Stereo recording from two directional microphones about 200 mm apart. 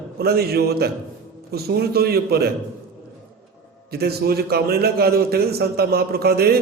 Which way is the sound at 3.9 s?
50° right (ahead or behind).